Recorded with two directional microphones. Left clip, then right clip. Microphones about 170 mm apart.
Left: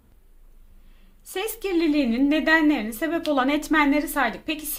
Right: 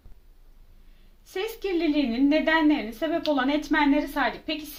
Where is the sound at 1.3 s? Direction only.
30° left (ahead or behind).